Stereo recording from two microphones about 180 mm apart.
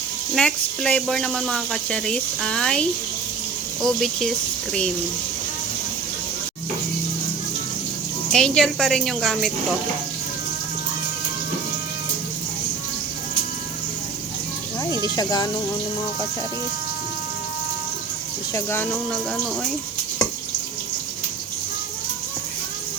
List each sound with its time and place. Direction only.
0.3 s speech: 5° left (ahead or behind)
3.8 s speech: centre (ahead or behind)
8.3 s speech: 5° left (ahead or behind)
14.8 s speech: 20° left (ahead or behind)
18.5 s speech: 10° left (ahead or behind)